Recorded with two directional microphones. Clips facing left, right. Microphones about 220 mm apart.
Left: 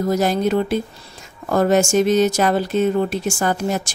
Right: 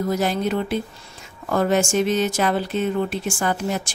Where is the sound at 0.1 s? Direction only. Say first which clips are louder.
Left 6 dB; 40° left (ahead or behind).